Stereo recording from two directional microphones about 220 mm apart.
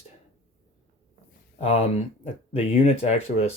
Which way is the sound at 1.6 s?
30° left (ahead or behind).